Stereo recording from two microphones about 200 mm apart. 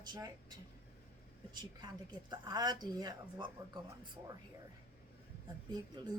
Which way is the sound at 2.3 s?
20° right (ahead or behind).